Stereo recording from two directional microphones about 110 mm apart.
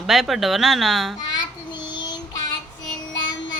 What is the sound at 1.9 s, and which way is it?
Child singing, 45° left (ahead or behind).